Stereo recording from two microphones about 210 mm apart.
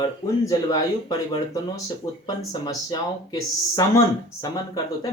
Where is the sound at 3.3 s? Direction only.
15° left (ahead or behind).